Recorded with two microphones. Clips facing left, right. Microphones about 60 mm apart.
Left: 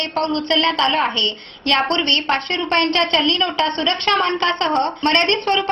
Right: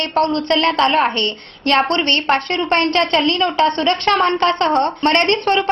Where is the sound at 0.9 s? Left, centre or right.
Right.